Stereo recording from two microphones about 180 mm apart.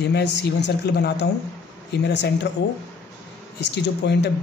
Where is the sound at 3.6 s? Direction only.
70° left (ahead or behind).